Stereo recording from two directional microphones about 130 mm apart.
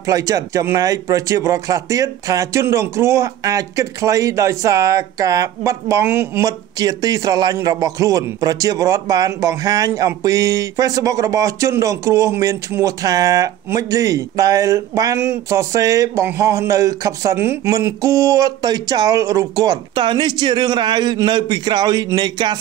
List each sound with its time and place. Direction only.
0.0 s a man's voice: 25° right (ahead or behind)